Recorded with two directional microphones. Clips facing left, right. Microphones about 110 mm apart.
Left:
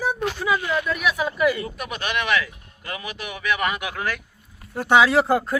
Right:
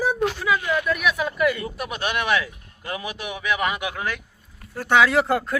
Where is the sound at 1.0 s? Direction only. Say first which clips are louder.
Left 2 dB; 5° left (ahead or behind).